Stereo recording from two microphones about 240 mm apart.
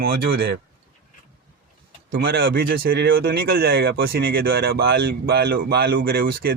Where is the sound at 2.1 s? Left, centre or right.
Right.